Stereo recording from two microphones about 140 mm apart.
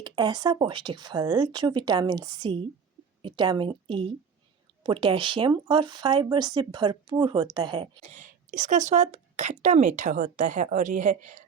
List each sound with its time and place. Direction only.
0.0 s speech: 30° right (ahead or behind)
8.0 s speech: 65° right (ahead or behind)